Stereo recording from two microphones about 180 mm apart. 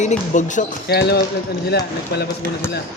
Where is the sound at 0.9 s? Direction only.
65° left (ahead or behind).